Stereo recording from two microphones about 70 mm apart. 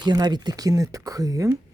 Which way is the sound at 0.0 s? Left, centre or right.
Right.